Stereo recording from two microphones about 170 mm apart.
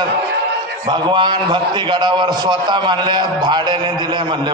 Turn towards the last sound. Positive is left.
turn(degrees=-25)  # may be behind; listen again after turning